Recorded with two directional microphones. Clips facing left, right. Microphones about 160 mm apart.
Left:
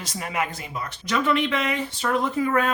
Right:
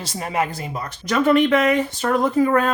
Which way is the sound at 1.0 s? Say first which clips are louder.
Right 7 dB; 45° right (ahead or behind).